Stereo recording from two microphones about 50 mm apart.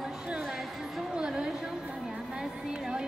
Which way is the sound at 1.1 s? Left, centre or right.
Centre.